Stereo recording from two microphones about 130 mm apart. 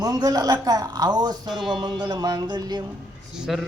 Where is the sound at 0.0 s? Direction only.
30° right (ahead or behind).